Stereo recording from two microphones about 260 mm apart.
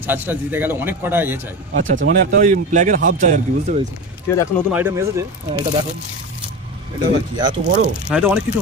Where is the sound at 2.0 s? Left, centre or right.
Right.